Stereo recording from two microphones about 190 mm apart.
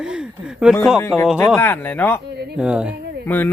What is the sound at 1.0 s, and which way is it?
Speech, 15° left (ahead or behind).